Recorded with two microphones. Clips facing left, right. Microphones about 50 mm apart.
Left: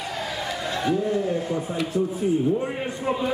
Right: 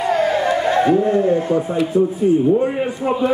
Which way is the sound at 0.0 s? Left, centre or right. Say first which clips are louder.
Right 13 dB; right.